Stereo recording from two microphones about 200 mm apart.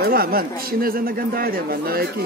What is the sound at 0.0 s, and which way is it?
Speech, 45° right (ahead or behind).